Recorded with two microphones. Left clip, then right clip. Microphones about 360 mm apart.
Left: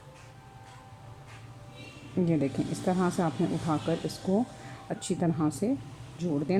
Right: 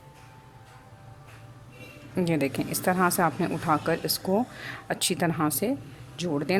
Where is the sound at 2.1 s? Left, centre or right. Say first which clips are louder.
Right 2 dB; right.